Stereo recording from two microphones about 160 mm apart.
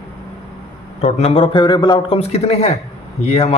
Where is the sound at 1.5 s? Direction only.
30° left (ahead or behind).